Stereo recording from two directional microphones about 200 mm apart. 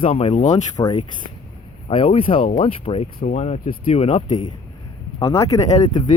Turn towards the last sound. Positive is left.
turn(degrees=20)  # may be behind; listen again after turning